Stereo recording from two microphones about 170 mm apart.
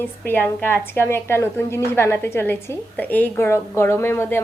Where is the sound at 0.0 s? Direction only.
10° left (ahead or behind).